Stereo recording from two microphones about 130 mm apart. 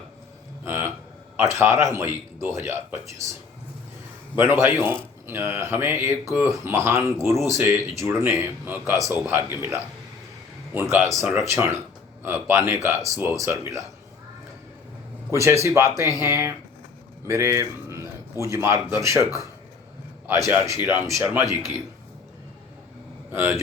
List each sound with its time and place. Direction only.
0.6 s a sound: 15° right (ahead or behind)
1.4 s speech: 20° right (ahead or behind)
4.4 s speech: 20° right (ahead or behind)
15.3 s speech: 20° right (ahead or behind)
17.2 s a sound: 20° right (ahead or behind)
18.5 s speech: 20° right (ahead or behind)
23.3 s speech: 15° right (ahead or behind)